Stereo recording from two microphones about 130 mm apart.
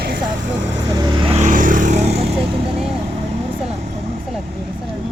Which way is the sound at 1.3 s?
75° right (ahead or behind).